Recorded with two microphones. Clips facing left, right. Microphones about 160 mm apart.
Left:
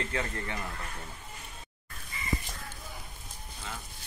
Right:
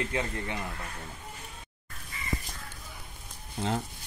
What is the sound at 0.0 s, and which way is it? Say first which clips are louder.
Speech: right 2 dB; 20° right (ahead or behind).